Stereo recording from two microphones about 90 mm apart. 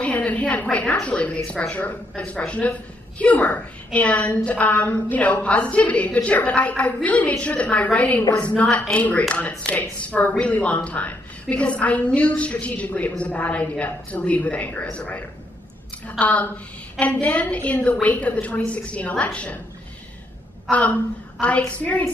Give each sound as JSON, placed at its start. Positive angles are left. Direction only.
{"t": 0.0, "sound": "a woman's voice", "side_deg": 15}
{"t": 20.7, "sound": "a woman's voice", "side_deg": 15}